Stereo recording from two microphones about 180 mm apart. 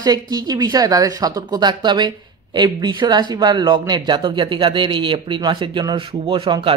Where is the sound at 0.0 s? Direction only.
20° right (ahead or behind).